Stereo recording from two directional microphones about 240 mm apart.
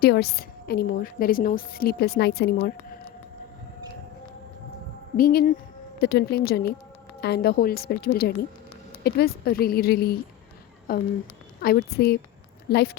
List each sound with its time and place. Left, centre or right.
0.0 s a woman's voice: left
5.1 s a woman's voice: left